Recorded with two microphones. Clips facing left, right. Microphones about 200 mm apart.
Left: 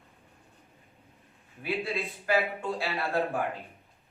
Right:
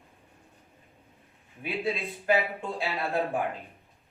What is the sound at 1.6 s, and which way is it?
Speech, 15° right (ahead or behind).